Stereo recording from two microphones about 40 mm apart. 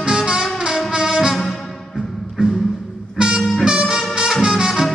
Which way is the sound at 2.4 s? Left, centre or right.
Right.